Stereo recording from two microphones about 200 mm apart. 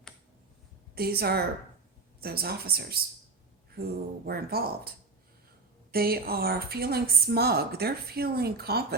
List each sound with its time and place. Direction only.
0.9 s a woman's voice: 50° right (ahead or behind)
4.3 s a woman's voice: 50° right (ahead or behind)
5.9 s a woman's voice: 50° right (ahead or behind)